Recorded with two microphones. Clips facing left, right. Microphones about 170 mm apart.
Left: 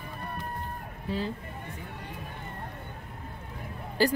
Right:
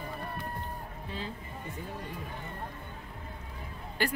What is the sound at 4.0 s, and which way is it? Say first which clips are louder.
Speech: left 7 dB; 35° left (ahead or behind).